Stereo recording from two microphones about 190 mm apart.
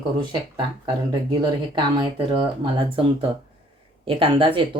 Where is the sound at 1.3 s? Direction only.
25° right (ahead or behind).